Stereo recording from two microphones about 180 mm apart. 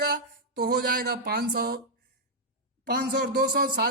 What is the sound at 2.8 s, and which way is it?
Speech, 65° right (ahead or behind).